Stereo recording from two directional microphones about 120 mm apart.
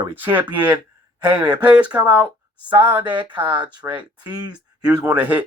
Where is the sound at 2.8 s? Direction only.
20° right (ahead or behind).